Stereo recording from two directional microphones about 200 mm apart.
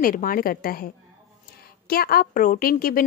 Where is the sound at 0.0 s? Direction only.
45° left (ahead or behind).